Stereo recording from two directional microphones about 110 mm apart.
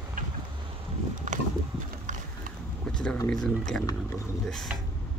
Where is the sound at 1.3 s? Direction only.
90° right.